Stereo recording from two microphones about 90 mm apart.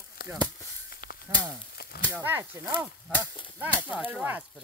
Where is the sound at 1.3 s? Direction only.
20° right (ahead or behind).